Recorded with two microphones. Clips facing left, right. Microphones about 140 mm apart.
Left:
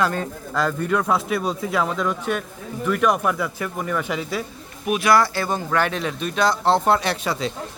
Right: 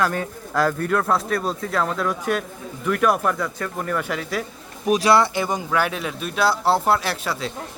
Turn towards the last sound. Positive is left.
turn(degrees=0)  # may be behind; listen again after turning